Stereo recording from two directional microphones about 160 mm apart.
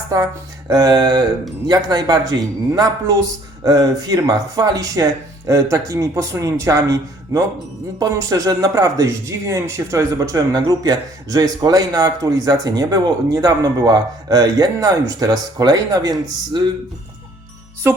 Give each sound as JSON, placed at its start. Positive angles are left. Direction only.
{"t": 0.1, "sound": "speech", "side_deg": -20}